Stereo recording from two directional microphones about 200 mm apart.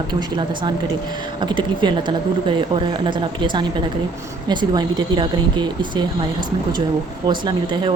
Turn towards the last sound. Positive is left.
turn(degrees=-25)  # may be behind; listen again after turning